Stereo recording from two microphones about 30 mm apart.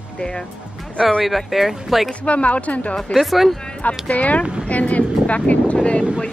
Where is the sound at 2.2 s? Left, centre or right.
Left.